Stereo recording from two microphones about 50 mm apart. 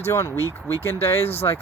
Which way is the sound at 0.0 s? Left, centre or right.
Left.